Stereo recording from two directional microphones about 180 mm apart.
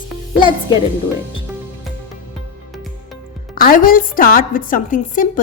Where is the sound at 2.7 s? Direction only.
Centre (ahead or behind).